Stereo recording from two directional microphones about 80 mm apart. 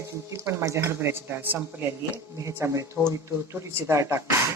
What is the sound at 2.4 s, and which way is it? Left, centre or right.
Speech, right.